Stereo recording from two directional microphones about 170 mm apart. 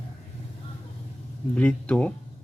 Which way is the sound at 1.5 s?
5° left (ahead or behind).